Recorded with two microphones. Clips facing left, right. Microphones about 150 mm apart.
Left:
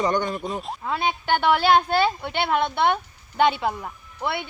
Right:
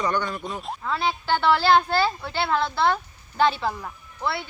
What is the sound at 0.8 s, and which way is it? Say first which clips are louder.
Speech: right 1 dB; 15° left (ahead or behind).